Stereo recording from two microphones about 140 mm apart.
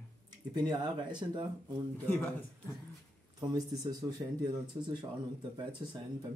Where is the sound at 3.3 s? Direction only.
25° right (ahead or behind).